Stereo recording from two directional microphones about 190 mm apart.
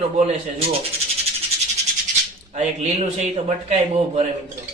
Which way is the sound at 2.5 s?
35° right (ahead or behind).